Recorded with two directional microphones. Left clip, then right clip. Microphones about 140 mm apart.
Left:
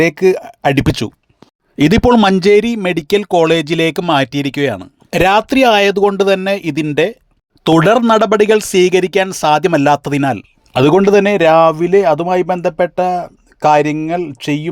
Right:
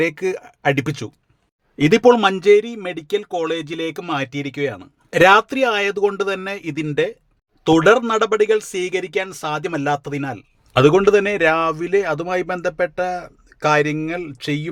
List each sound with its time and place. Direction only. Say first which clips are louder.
0.0 s speech: left 9 dB; 45° left (ahead or behind)
4.1 s speech: left 10 dB; 50° left (ahead or behind)
7.6 s speech: left 3 dB; 60° left (ahead or behind)
10.8 s a man's voice: left 3 dB; 40° left (ahead or behind)